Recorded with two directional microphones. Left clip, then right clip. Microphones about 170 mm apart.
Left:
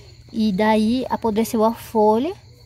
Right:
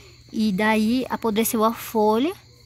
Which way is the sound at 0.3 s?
Centre (ahead or behind).